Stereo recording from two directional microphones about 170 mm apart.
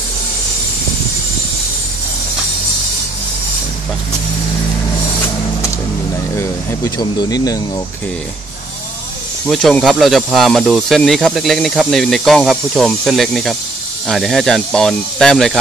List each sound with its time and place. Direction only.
6.3 s speech: 15° left (ahead or behind)
9.5 s speech: centre (ahead or behind)